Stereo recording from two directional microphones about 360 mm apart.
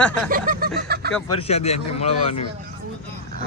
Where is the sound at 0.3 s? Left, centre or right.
Right.